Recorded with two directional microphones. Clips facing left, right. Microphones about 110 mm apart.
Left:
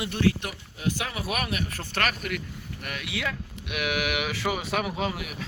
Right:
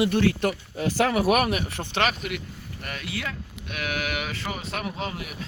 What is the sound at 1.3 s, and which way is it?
Speech, 40° right (ahead or behind).